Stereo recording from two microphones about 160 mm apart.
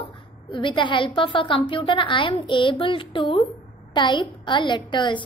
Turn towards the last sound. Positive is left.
turn(degrees=30)  # may be behind; listen again after turning